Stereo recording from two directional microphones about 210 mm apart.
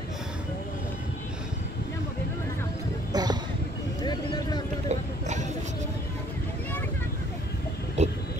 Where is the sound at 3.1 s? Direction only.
20° right (ahead or behind).